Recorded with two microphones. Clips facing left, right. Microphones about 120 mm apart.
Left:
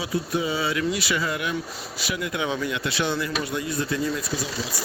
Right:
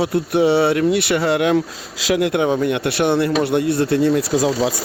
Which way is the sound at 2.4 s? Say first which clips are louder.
Right 9 dB; 50° right (ahead or behind).